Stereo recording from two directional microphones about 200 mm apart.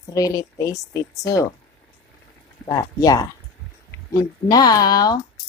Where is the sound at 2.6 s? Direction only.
15° left (ahead or behind).